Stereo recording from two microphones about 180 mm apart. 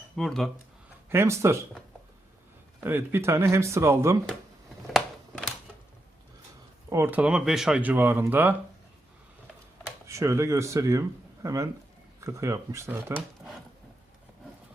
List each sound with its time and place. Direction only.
0.2 s speech: centre (ahead or behind)
1.1 s speech: 15° right (ahead or behind)
2.8 s speech: 10° right (ahead or behind)
6.9 s speech: 10° right (ahead or behind)
10.1 s speech: 15° right (ahead or behind)